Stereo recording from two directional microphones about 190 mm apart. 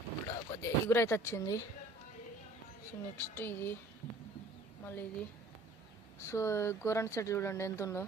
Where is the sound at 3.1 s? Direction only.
15° left (ahead or behind).